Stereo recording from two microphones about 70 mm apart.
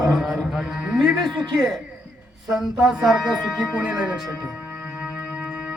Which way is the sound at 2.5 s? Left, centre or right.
Centre.